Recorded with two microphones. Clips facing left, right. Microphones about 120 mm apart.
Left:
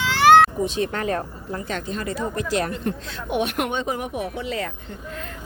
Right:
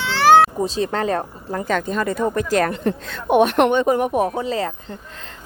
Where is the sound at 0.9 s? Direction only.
35° right (ahead or behind).